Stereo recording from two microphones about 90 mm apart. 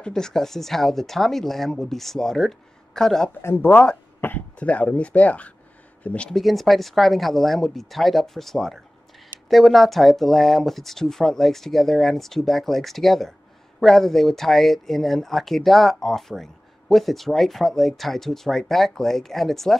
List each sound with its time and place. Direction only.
0.0 s speech: 5° left (ahead or behind)
3.4 s speech: 20° left (ahead or behind)
6.4 s speech: centre (ahead or behind)